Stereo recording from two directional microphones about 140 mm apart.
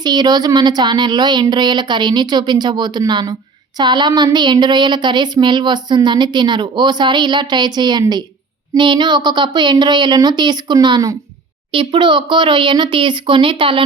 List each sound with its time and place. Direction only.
0.0 s speech: 30° right (ahead or behind)